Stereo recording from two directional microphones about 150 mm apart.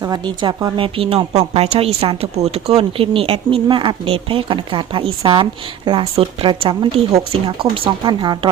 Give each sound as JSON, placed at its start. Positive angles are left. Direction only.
{"t": 0.0, "sound": "speech", "side_deg": -30}